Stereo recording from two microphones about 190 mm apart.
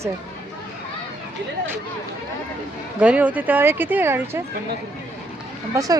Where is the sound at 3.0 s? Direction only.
5° right (ahead or behind).